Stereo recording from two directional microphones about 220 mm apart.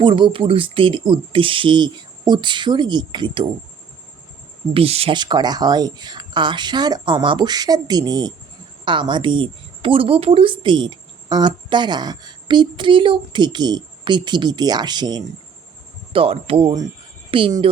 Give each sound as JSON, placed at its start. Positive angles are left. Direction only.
{"t": 0.0, "sound": "a woman's voice", "side_deg": -20}
{"t": 4.7, "sound": "a woman's voice", "side_deg": -25}